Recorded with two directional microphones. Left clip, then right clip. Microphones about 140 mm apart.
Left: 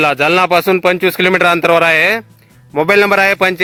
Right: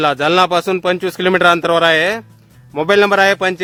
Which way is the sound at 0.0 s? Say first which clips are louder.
Left 2 dB; 20° left (ahead or behind).